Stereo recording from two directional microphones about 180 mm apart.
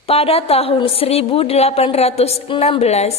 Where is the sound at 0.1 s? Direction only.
35° left (ahead or behind).